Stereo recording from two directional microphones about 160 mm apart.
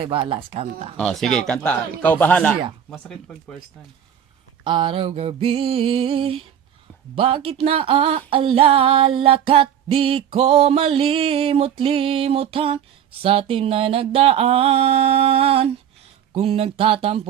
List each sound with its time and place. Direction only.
0.0 s female singing: 35° right (ahead or behind)
0.9 s speech: centre (ahead or behind)
4.6 s female singing: 30° right (ahead or behind)